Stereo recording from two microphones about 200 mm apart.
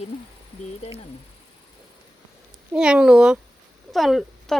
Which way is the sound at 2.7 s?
5° right (ahead or behind).